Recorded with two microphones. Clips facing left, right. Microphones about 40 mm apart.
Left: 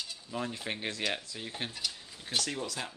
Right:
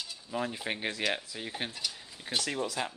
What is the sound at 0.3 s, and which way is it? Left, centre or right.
Speech, centre.